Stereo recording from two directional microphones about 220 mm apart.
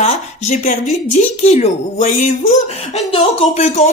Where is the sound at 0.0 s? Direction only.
30° left (ahead or behind).